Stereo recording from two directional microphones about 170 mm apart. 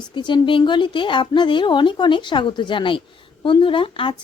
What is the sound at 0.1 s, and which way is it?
A woman's voice, 25° left (ahead or behind).